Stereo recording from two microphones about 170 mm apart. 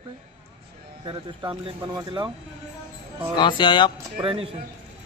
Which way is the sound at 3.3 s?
25° left (ahead or behind).